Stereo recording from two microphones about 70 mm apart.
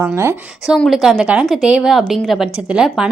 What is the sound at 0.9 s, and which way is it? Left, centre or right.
A woman's voice, centre.